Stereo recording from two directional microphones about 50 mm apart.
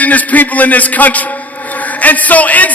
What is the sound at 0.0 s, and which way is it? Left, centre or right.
Speech, left.